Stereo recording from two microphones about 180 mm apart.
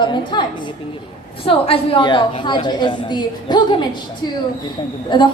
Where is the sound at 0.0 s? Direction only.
25° left (ahead or behind).